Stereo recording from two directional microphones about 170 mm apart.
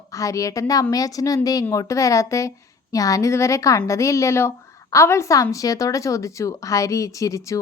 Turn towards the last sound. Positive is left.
turn(degrees=20)  # may be behind; listen again after turning